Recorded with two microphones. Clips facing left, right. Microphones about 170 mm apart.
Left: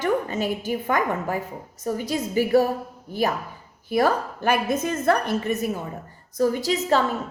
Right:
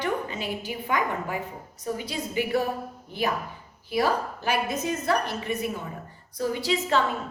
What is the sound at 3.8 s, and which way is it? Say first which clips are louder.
A woman's voice: left 4 dB; 50° left (ahead or behind).